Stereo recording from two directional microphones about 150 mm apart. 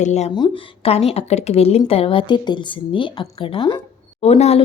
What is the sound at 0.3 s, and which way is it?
A woman's voice, 35° left (ahead or behind).